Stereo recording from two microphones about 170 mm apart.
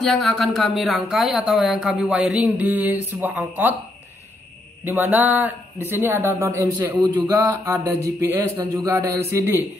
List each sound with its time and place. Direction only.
0.0 s speech: centre (ahead or behind)
4.8 s speech: 15° right (ahead or behind)